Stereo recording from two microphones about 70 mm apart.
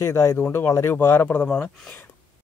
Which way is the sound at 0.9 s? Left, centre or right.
Left.